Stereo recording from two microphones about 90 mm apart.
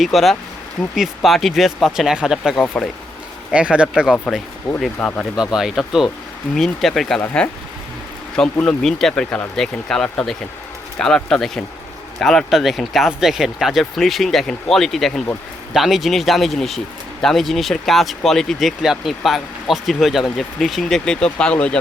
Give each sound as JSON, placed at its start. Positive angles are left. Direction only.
{"t": 0.0, "sound": "speech", "side_deg": 0}
{"t": 4.9, "sound": "speech", "side_deg": 15}
{"t": 5.4, "sound": "speech", "side_deg": -5}